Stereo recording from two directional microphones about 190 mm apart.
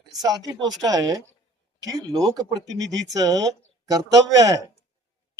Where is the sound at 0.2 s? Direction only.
20° right (ahead or behind).